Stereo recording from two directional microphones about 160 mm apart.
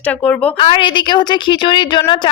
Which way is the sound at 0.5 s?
30° left (ahead or behind).